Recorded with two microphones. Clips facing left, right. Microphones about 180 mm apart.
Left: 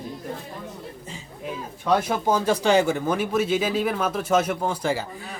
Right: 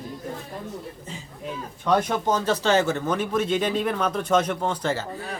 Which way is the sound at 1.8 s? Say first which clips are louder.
Even; 5° left (ahead or behind).